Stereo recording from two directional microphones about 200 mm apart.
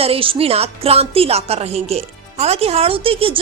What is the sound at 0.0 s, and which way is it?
A woman's voice, 30° right (ahead or behind).